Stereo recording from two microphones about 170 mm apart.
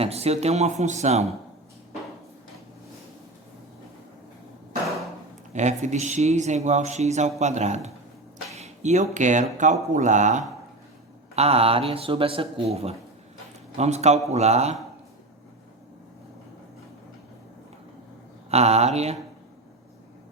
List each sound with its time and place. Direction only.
0.0 s a man's voice: 35° right (ahead or behind)
5.5 s speech: 45° right (ahead or behind)
8.5 s a sound: 40° right (ahead or behind)
9.1 s a man's voice: 45° right (ahead or behind)
18.5 s a man's voice: 40° right (ahead or behind)